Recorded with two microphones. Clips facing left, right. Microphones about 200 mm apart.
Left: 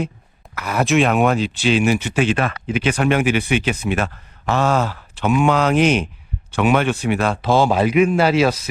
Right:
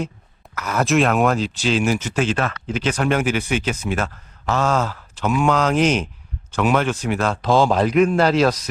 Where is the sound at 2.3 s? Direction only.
10° left (ahead or behind).